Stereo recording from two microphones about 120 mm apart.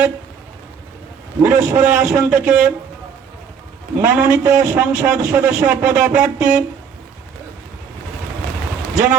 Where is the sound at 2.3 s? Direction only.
5° right (ahead or behind).